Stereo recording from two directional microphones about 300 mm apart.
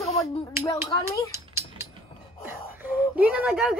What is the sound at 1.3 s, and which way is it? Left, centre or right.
Mechanisms, centre.